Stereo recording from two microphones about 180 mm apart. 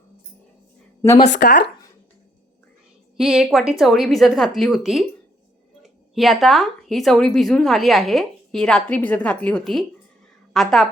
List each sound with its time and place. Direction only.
1.3 s speech: 55° left (ahead or behind)
3.2 s a woman's voice: centre (ahead or behind)